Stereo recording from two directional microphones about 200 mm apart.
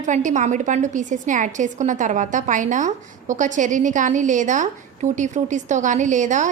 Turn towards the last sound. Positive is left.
turn(degrees=-40)  # may be behind; listen again after turning